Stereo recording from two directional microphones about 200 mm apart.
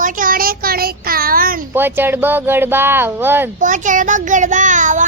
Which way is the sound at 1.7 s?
10° right (ahead or behind).